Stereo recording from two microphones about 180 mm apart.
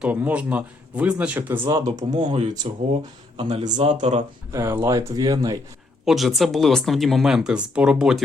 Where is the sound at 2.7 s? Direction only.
35° right (ahead or behind).